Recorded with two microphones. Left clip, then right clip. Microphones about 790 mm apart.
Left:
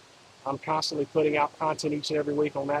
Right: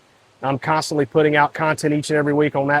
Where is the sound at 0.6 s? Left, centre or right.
Right.